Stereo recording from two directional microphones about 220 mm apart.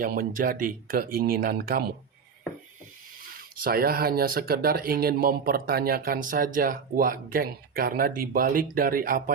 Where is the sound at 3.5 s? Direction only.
40° right (ahead or behind).